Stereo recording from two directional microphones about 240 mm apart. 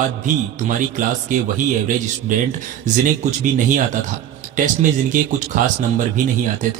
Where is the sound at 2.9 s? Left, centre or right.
Right.